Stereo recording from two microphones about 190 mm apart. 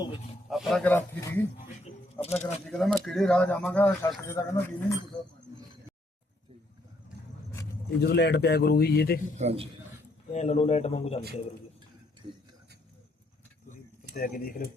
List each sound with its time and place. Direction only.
0.5 s speech: centre (ahead or behind)
2.2 s a man's voice: 35° left (ahead or behind)
2.6 s speech: 5° left (ahead or behind)
4.2 s speech: 15° left (ahead or behind)
8.0 s a man's voice: 60° left (ahead or behind)
9.4 s a man's voice: 35° right (ahead or behind)
10.3 s a man's voice: 35° left (ahead or behind)
14.2 s speech: 45° left (ahead or behind)